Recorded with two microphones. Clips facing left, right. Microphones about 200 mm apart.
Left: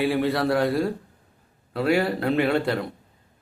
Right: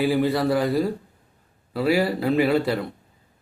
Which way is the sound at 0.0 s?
Centre (ahead or behind).